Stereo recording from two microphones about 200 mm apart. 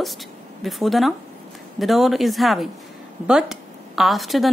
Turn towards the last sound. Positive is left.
turn(degrees=0)  # may be behind; listen again after turning